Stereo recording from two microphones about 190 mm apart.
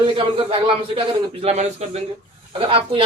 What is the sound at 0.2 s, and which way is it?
A man's voice, 30° right (ahead or behind).